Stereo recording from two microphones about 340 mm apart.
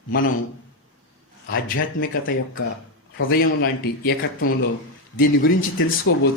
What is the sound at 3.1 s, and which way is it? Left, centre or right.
Speech, left.